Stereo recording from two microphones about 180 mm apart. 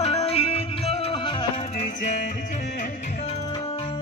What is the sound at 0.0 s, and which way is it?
Music, 35° left (ahead or behind).